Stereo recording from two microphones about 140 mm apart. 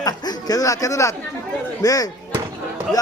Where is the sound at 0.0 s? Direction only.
25° left (ahead or behind).